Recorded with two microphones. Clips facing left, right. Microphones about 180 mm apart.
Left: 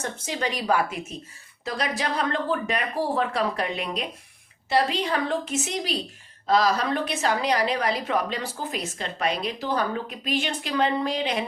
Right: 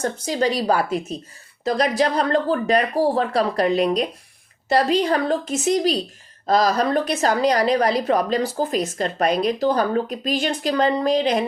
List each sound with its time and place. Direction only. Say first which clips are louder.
0.0 s a woman's voice: right 8 dB; 35° right (ahead or behind)